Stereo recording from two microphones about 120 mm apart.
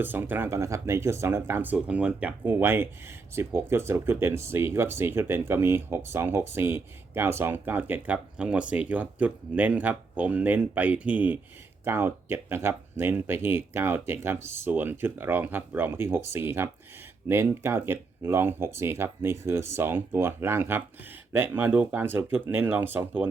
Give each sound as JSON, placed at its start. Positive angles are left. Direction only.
{"t": 0.0, "sound": "speech", "side_deg": -15}